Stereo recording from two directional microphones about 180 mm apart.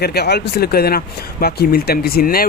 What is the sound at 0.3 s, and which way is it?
Speech, 60° left (ahead or behind).